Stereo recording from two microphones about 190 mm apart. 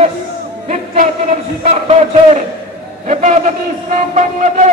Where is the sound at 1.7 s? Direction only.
35° right (ahead or behind).